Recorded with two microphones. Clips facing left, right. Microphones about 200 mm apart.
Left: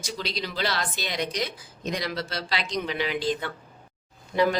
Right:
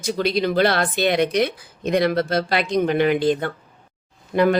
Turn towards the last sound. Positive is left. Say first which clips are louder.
# right 5 dB
turn(degrees=-55)  # may be behind; listen again after turning